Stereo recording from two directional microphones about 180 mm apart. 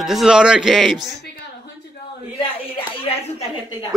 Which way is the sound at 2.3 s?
30° left (ahead or behind).